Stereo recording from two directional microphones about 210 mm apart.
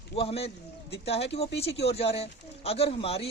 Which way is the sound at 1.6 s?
30° left (ahead or behind).